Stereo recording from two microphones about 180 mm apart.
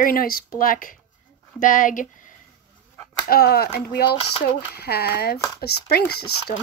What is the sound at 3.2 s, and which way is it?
Speech, 60° left (ahead or behind).